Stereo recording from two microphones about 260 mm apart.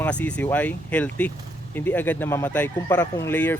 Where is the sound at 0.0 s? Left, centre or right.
Centre.